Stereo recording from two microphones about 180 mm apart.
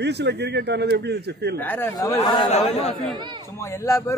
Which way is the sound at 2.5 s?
35° left (ahead or behind).